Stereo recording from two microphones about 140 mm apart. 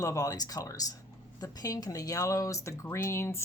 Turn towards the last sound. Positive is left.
turn(degrees=20)  # may be behind; listen again after turning